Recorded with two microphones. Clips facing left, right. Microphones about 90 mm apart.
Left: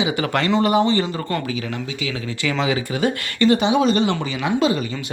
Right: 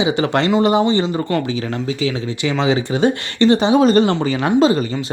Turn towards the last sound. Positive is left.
turn(degrees=-35)  # may be behind; listen again after turning